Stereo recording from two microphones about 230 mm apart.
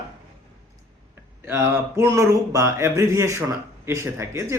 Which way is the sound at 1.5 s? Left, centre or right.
Centre.